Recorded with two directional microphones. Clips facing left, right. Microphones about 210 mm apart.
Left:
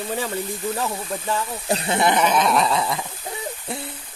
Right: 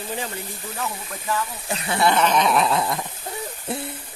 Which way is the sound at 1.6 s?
30° left (ahead or behind).